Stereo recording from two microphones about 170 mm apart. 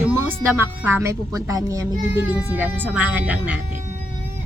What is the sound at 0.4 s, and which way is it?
Speech, 15° right (ahead or behind).